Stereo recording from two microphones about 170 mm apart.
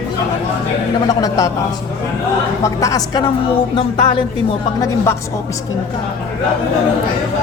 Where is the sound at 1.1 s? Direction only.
20° left (ahead or behind).